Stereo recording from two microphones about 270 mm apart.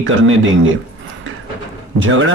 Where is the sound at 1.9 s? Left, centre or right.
Right.